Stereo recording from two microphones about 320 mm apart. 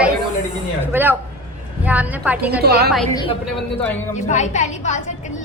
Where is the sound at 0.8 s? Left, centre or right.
Centre.